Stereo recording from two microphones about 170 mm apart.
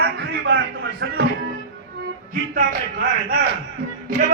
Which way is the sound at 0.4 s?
75° right (ahead or behind).